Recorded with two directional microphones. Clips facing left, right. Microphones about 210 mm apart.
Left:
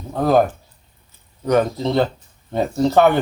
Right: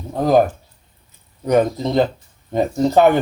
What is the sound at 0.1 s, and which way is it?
Speech, 15° right (ahead or behind).